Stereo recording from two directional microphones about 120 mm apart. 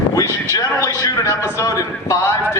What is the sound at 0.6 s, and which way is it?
A man's voice, 30° left (ahead or behind).